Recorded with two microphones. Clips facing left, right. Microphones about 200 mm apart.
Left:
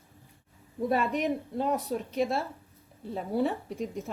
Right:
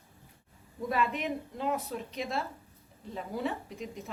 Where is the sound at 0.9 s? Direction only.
45° left (ahead or behind).